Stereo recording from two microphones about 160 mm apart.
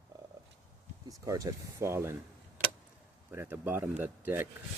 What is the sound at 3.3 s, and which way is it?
Speech, 15° right (ahead or behind).